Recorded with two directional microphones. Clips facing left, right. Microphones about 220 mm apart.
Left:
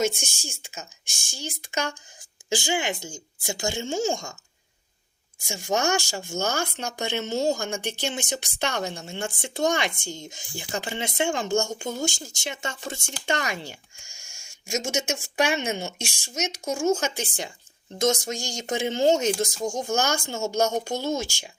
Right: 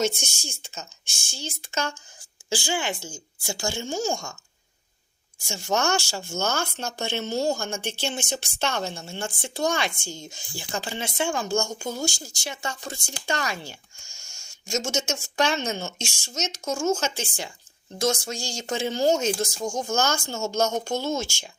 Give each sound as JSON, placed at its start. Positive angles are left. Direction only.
{"t": 0.4, "sound": "speech", "side_deg": 10}
{"t": 5.5, "sound": "speech", "side_deg": 15}